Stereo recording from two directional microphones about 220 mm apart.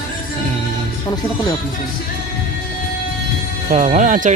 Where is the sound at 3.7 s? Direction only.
35° right (ahead or behind).